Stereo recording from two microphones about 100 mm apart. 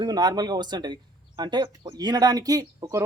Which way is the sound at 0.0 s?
45° right (ahead or behind).